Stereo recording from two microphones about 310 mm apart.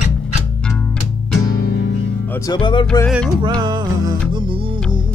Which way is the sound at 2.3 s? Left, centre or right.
Centre.